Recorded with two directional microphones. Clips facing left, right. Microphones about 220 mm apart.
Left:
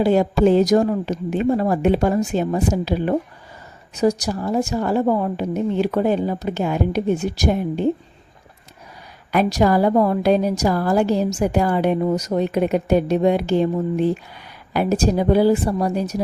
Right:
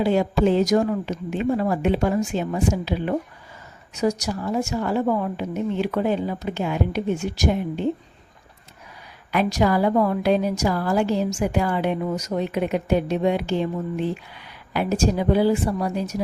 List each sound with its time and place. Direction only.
0.0 s a woman's voice: 40° left (ahead or behind)
9.3 s a woman's voice: 40° left (ahead or behind)